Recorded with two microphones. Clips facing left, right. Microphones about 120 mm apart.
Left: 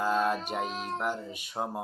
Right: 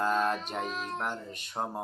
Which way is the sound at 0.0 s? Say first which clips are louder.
Left 1 dB; 5° left (ahead or behind).